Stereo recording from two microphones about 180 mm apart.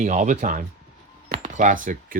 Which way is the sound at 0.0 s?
40° right (ahead or behind).